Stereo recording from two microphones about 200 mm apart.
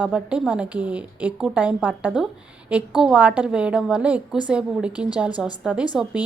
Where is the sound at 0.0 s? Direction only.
5° right (ahead or behind).